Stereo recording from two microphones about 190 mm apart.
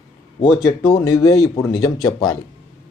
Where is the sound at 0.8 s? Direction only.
15° left (ahead or behind).